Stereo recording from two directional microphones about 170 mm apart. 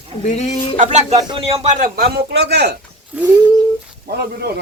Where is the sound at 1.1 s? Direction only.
30° right (ahead or behind); by 1.9 s 45° right (ahead or behind).